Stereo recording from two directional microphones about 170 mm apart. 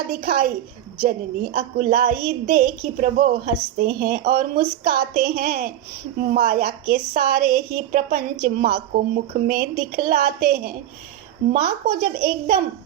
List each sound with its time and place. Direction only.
0.1 s a woman's voice: 60° right (ahead or behind)